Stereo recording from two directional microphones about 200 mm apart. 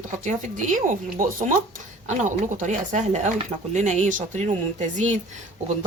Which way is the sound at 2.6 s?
40° right (ahead or behind).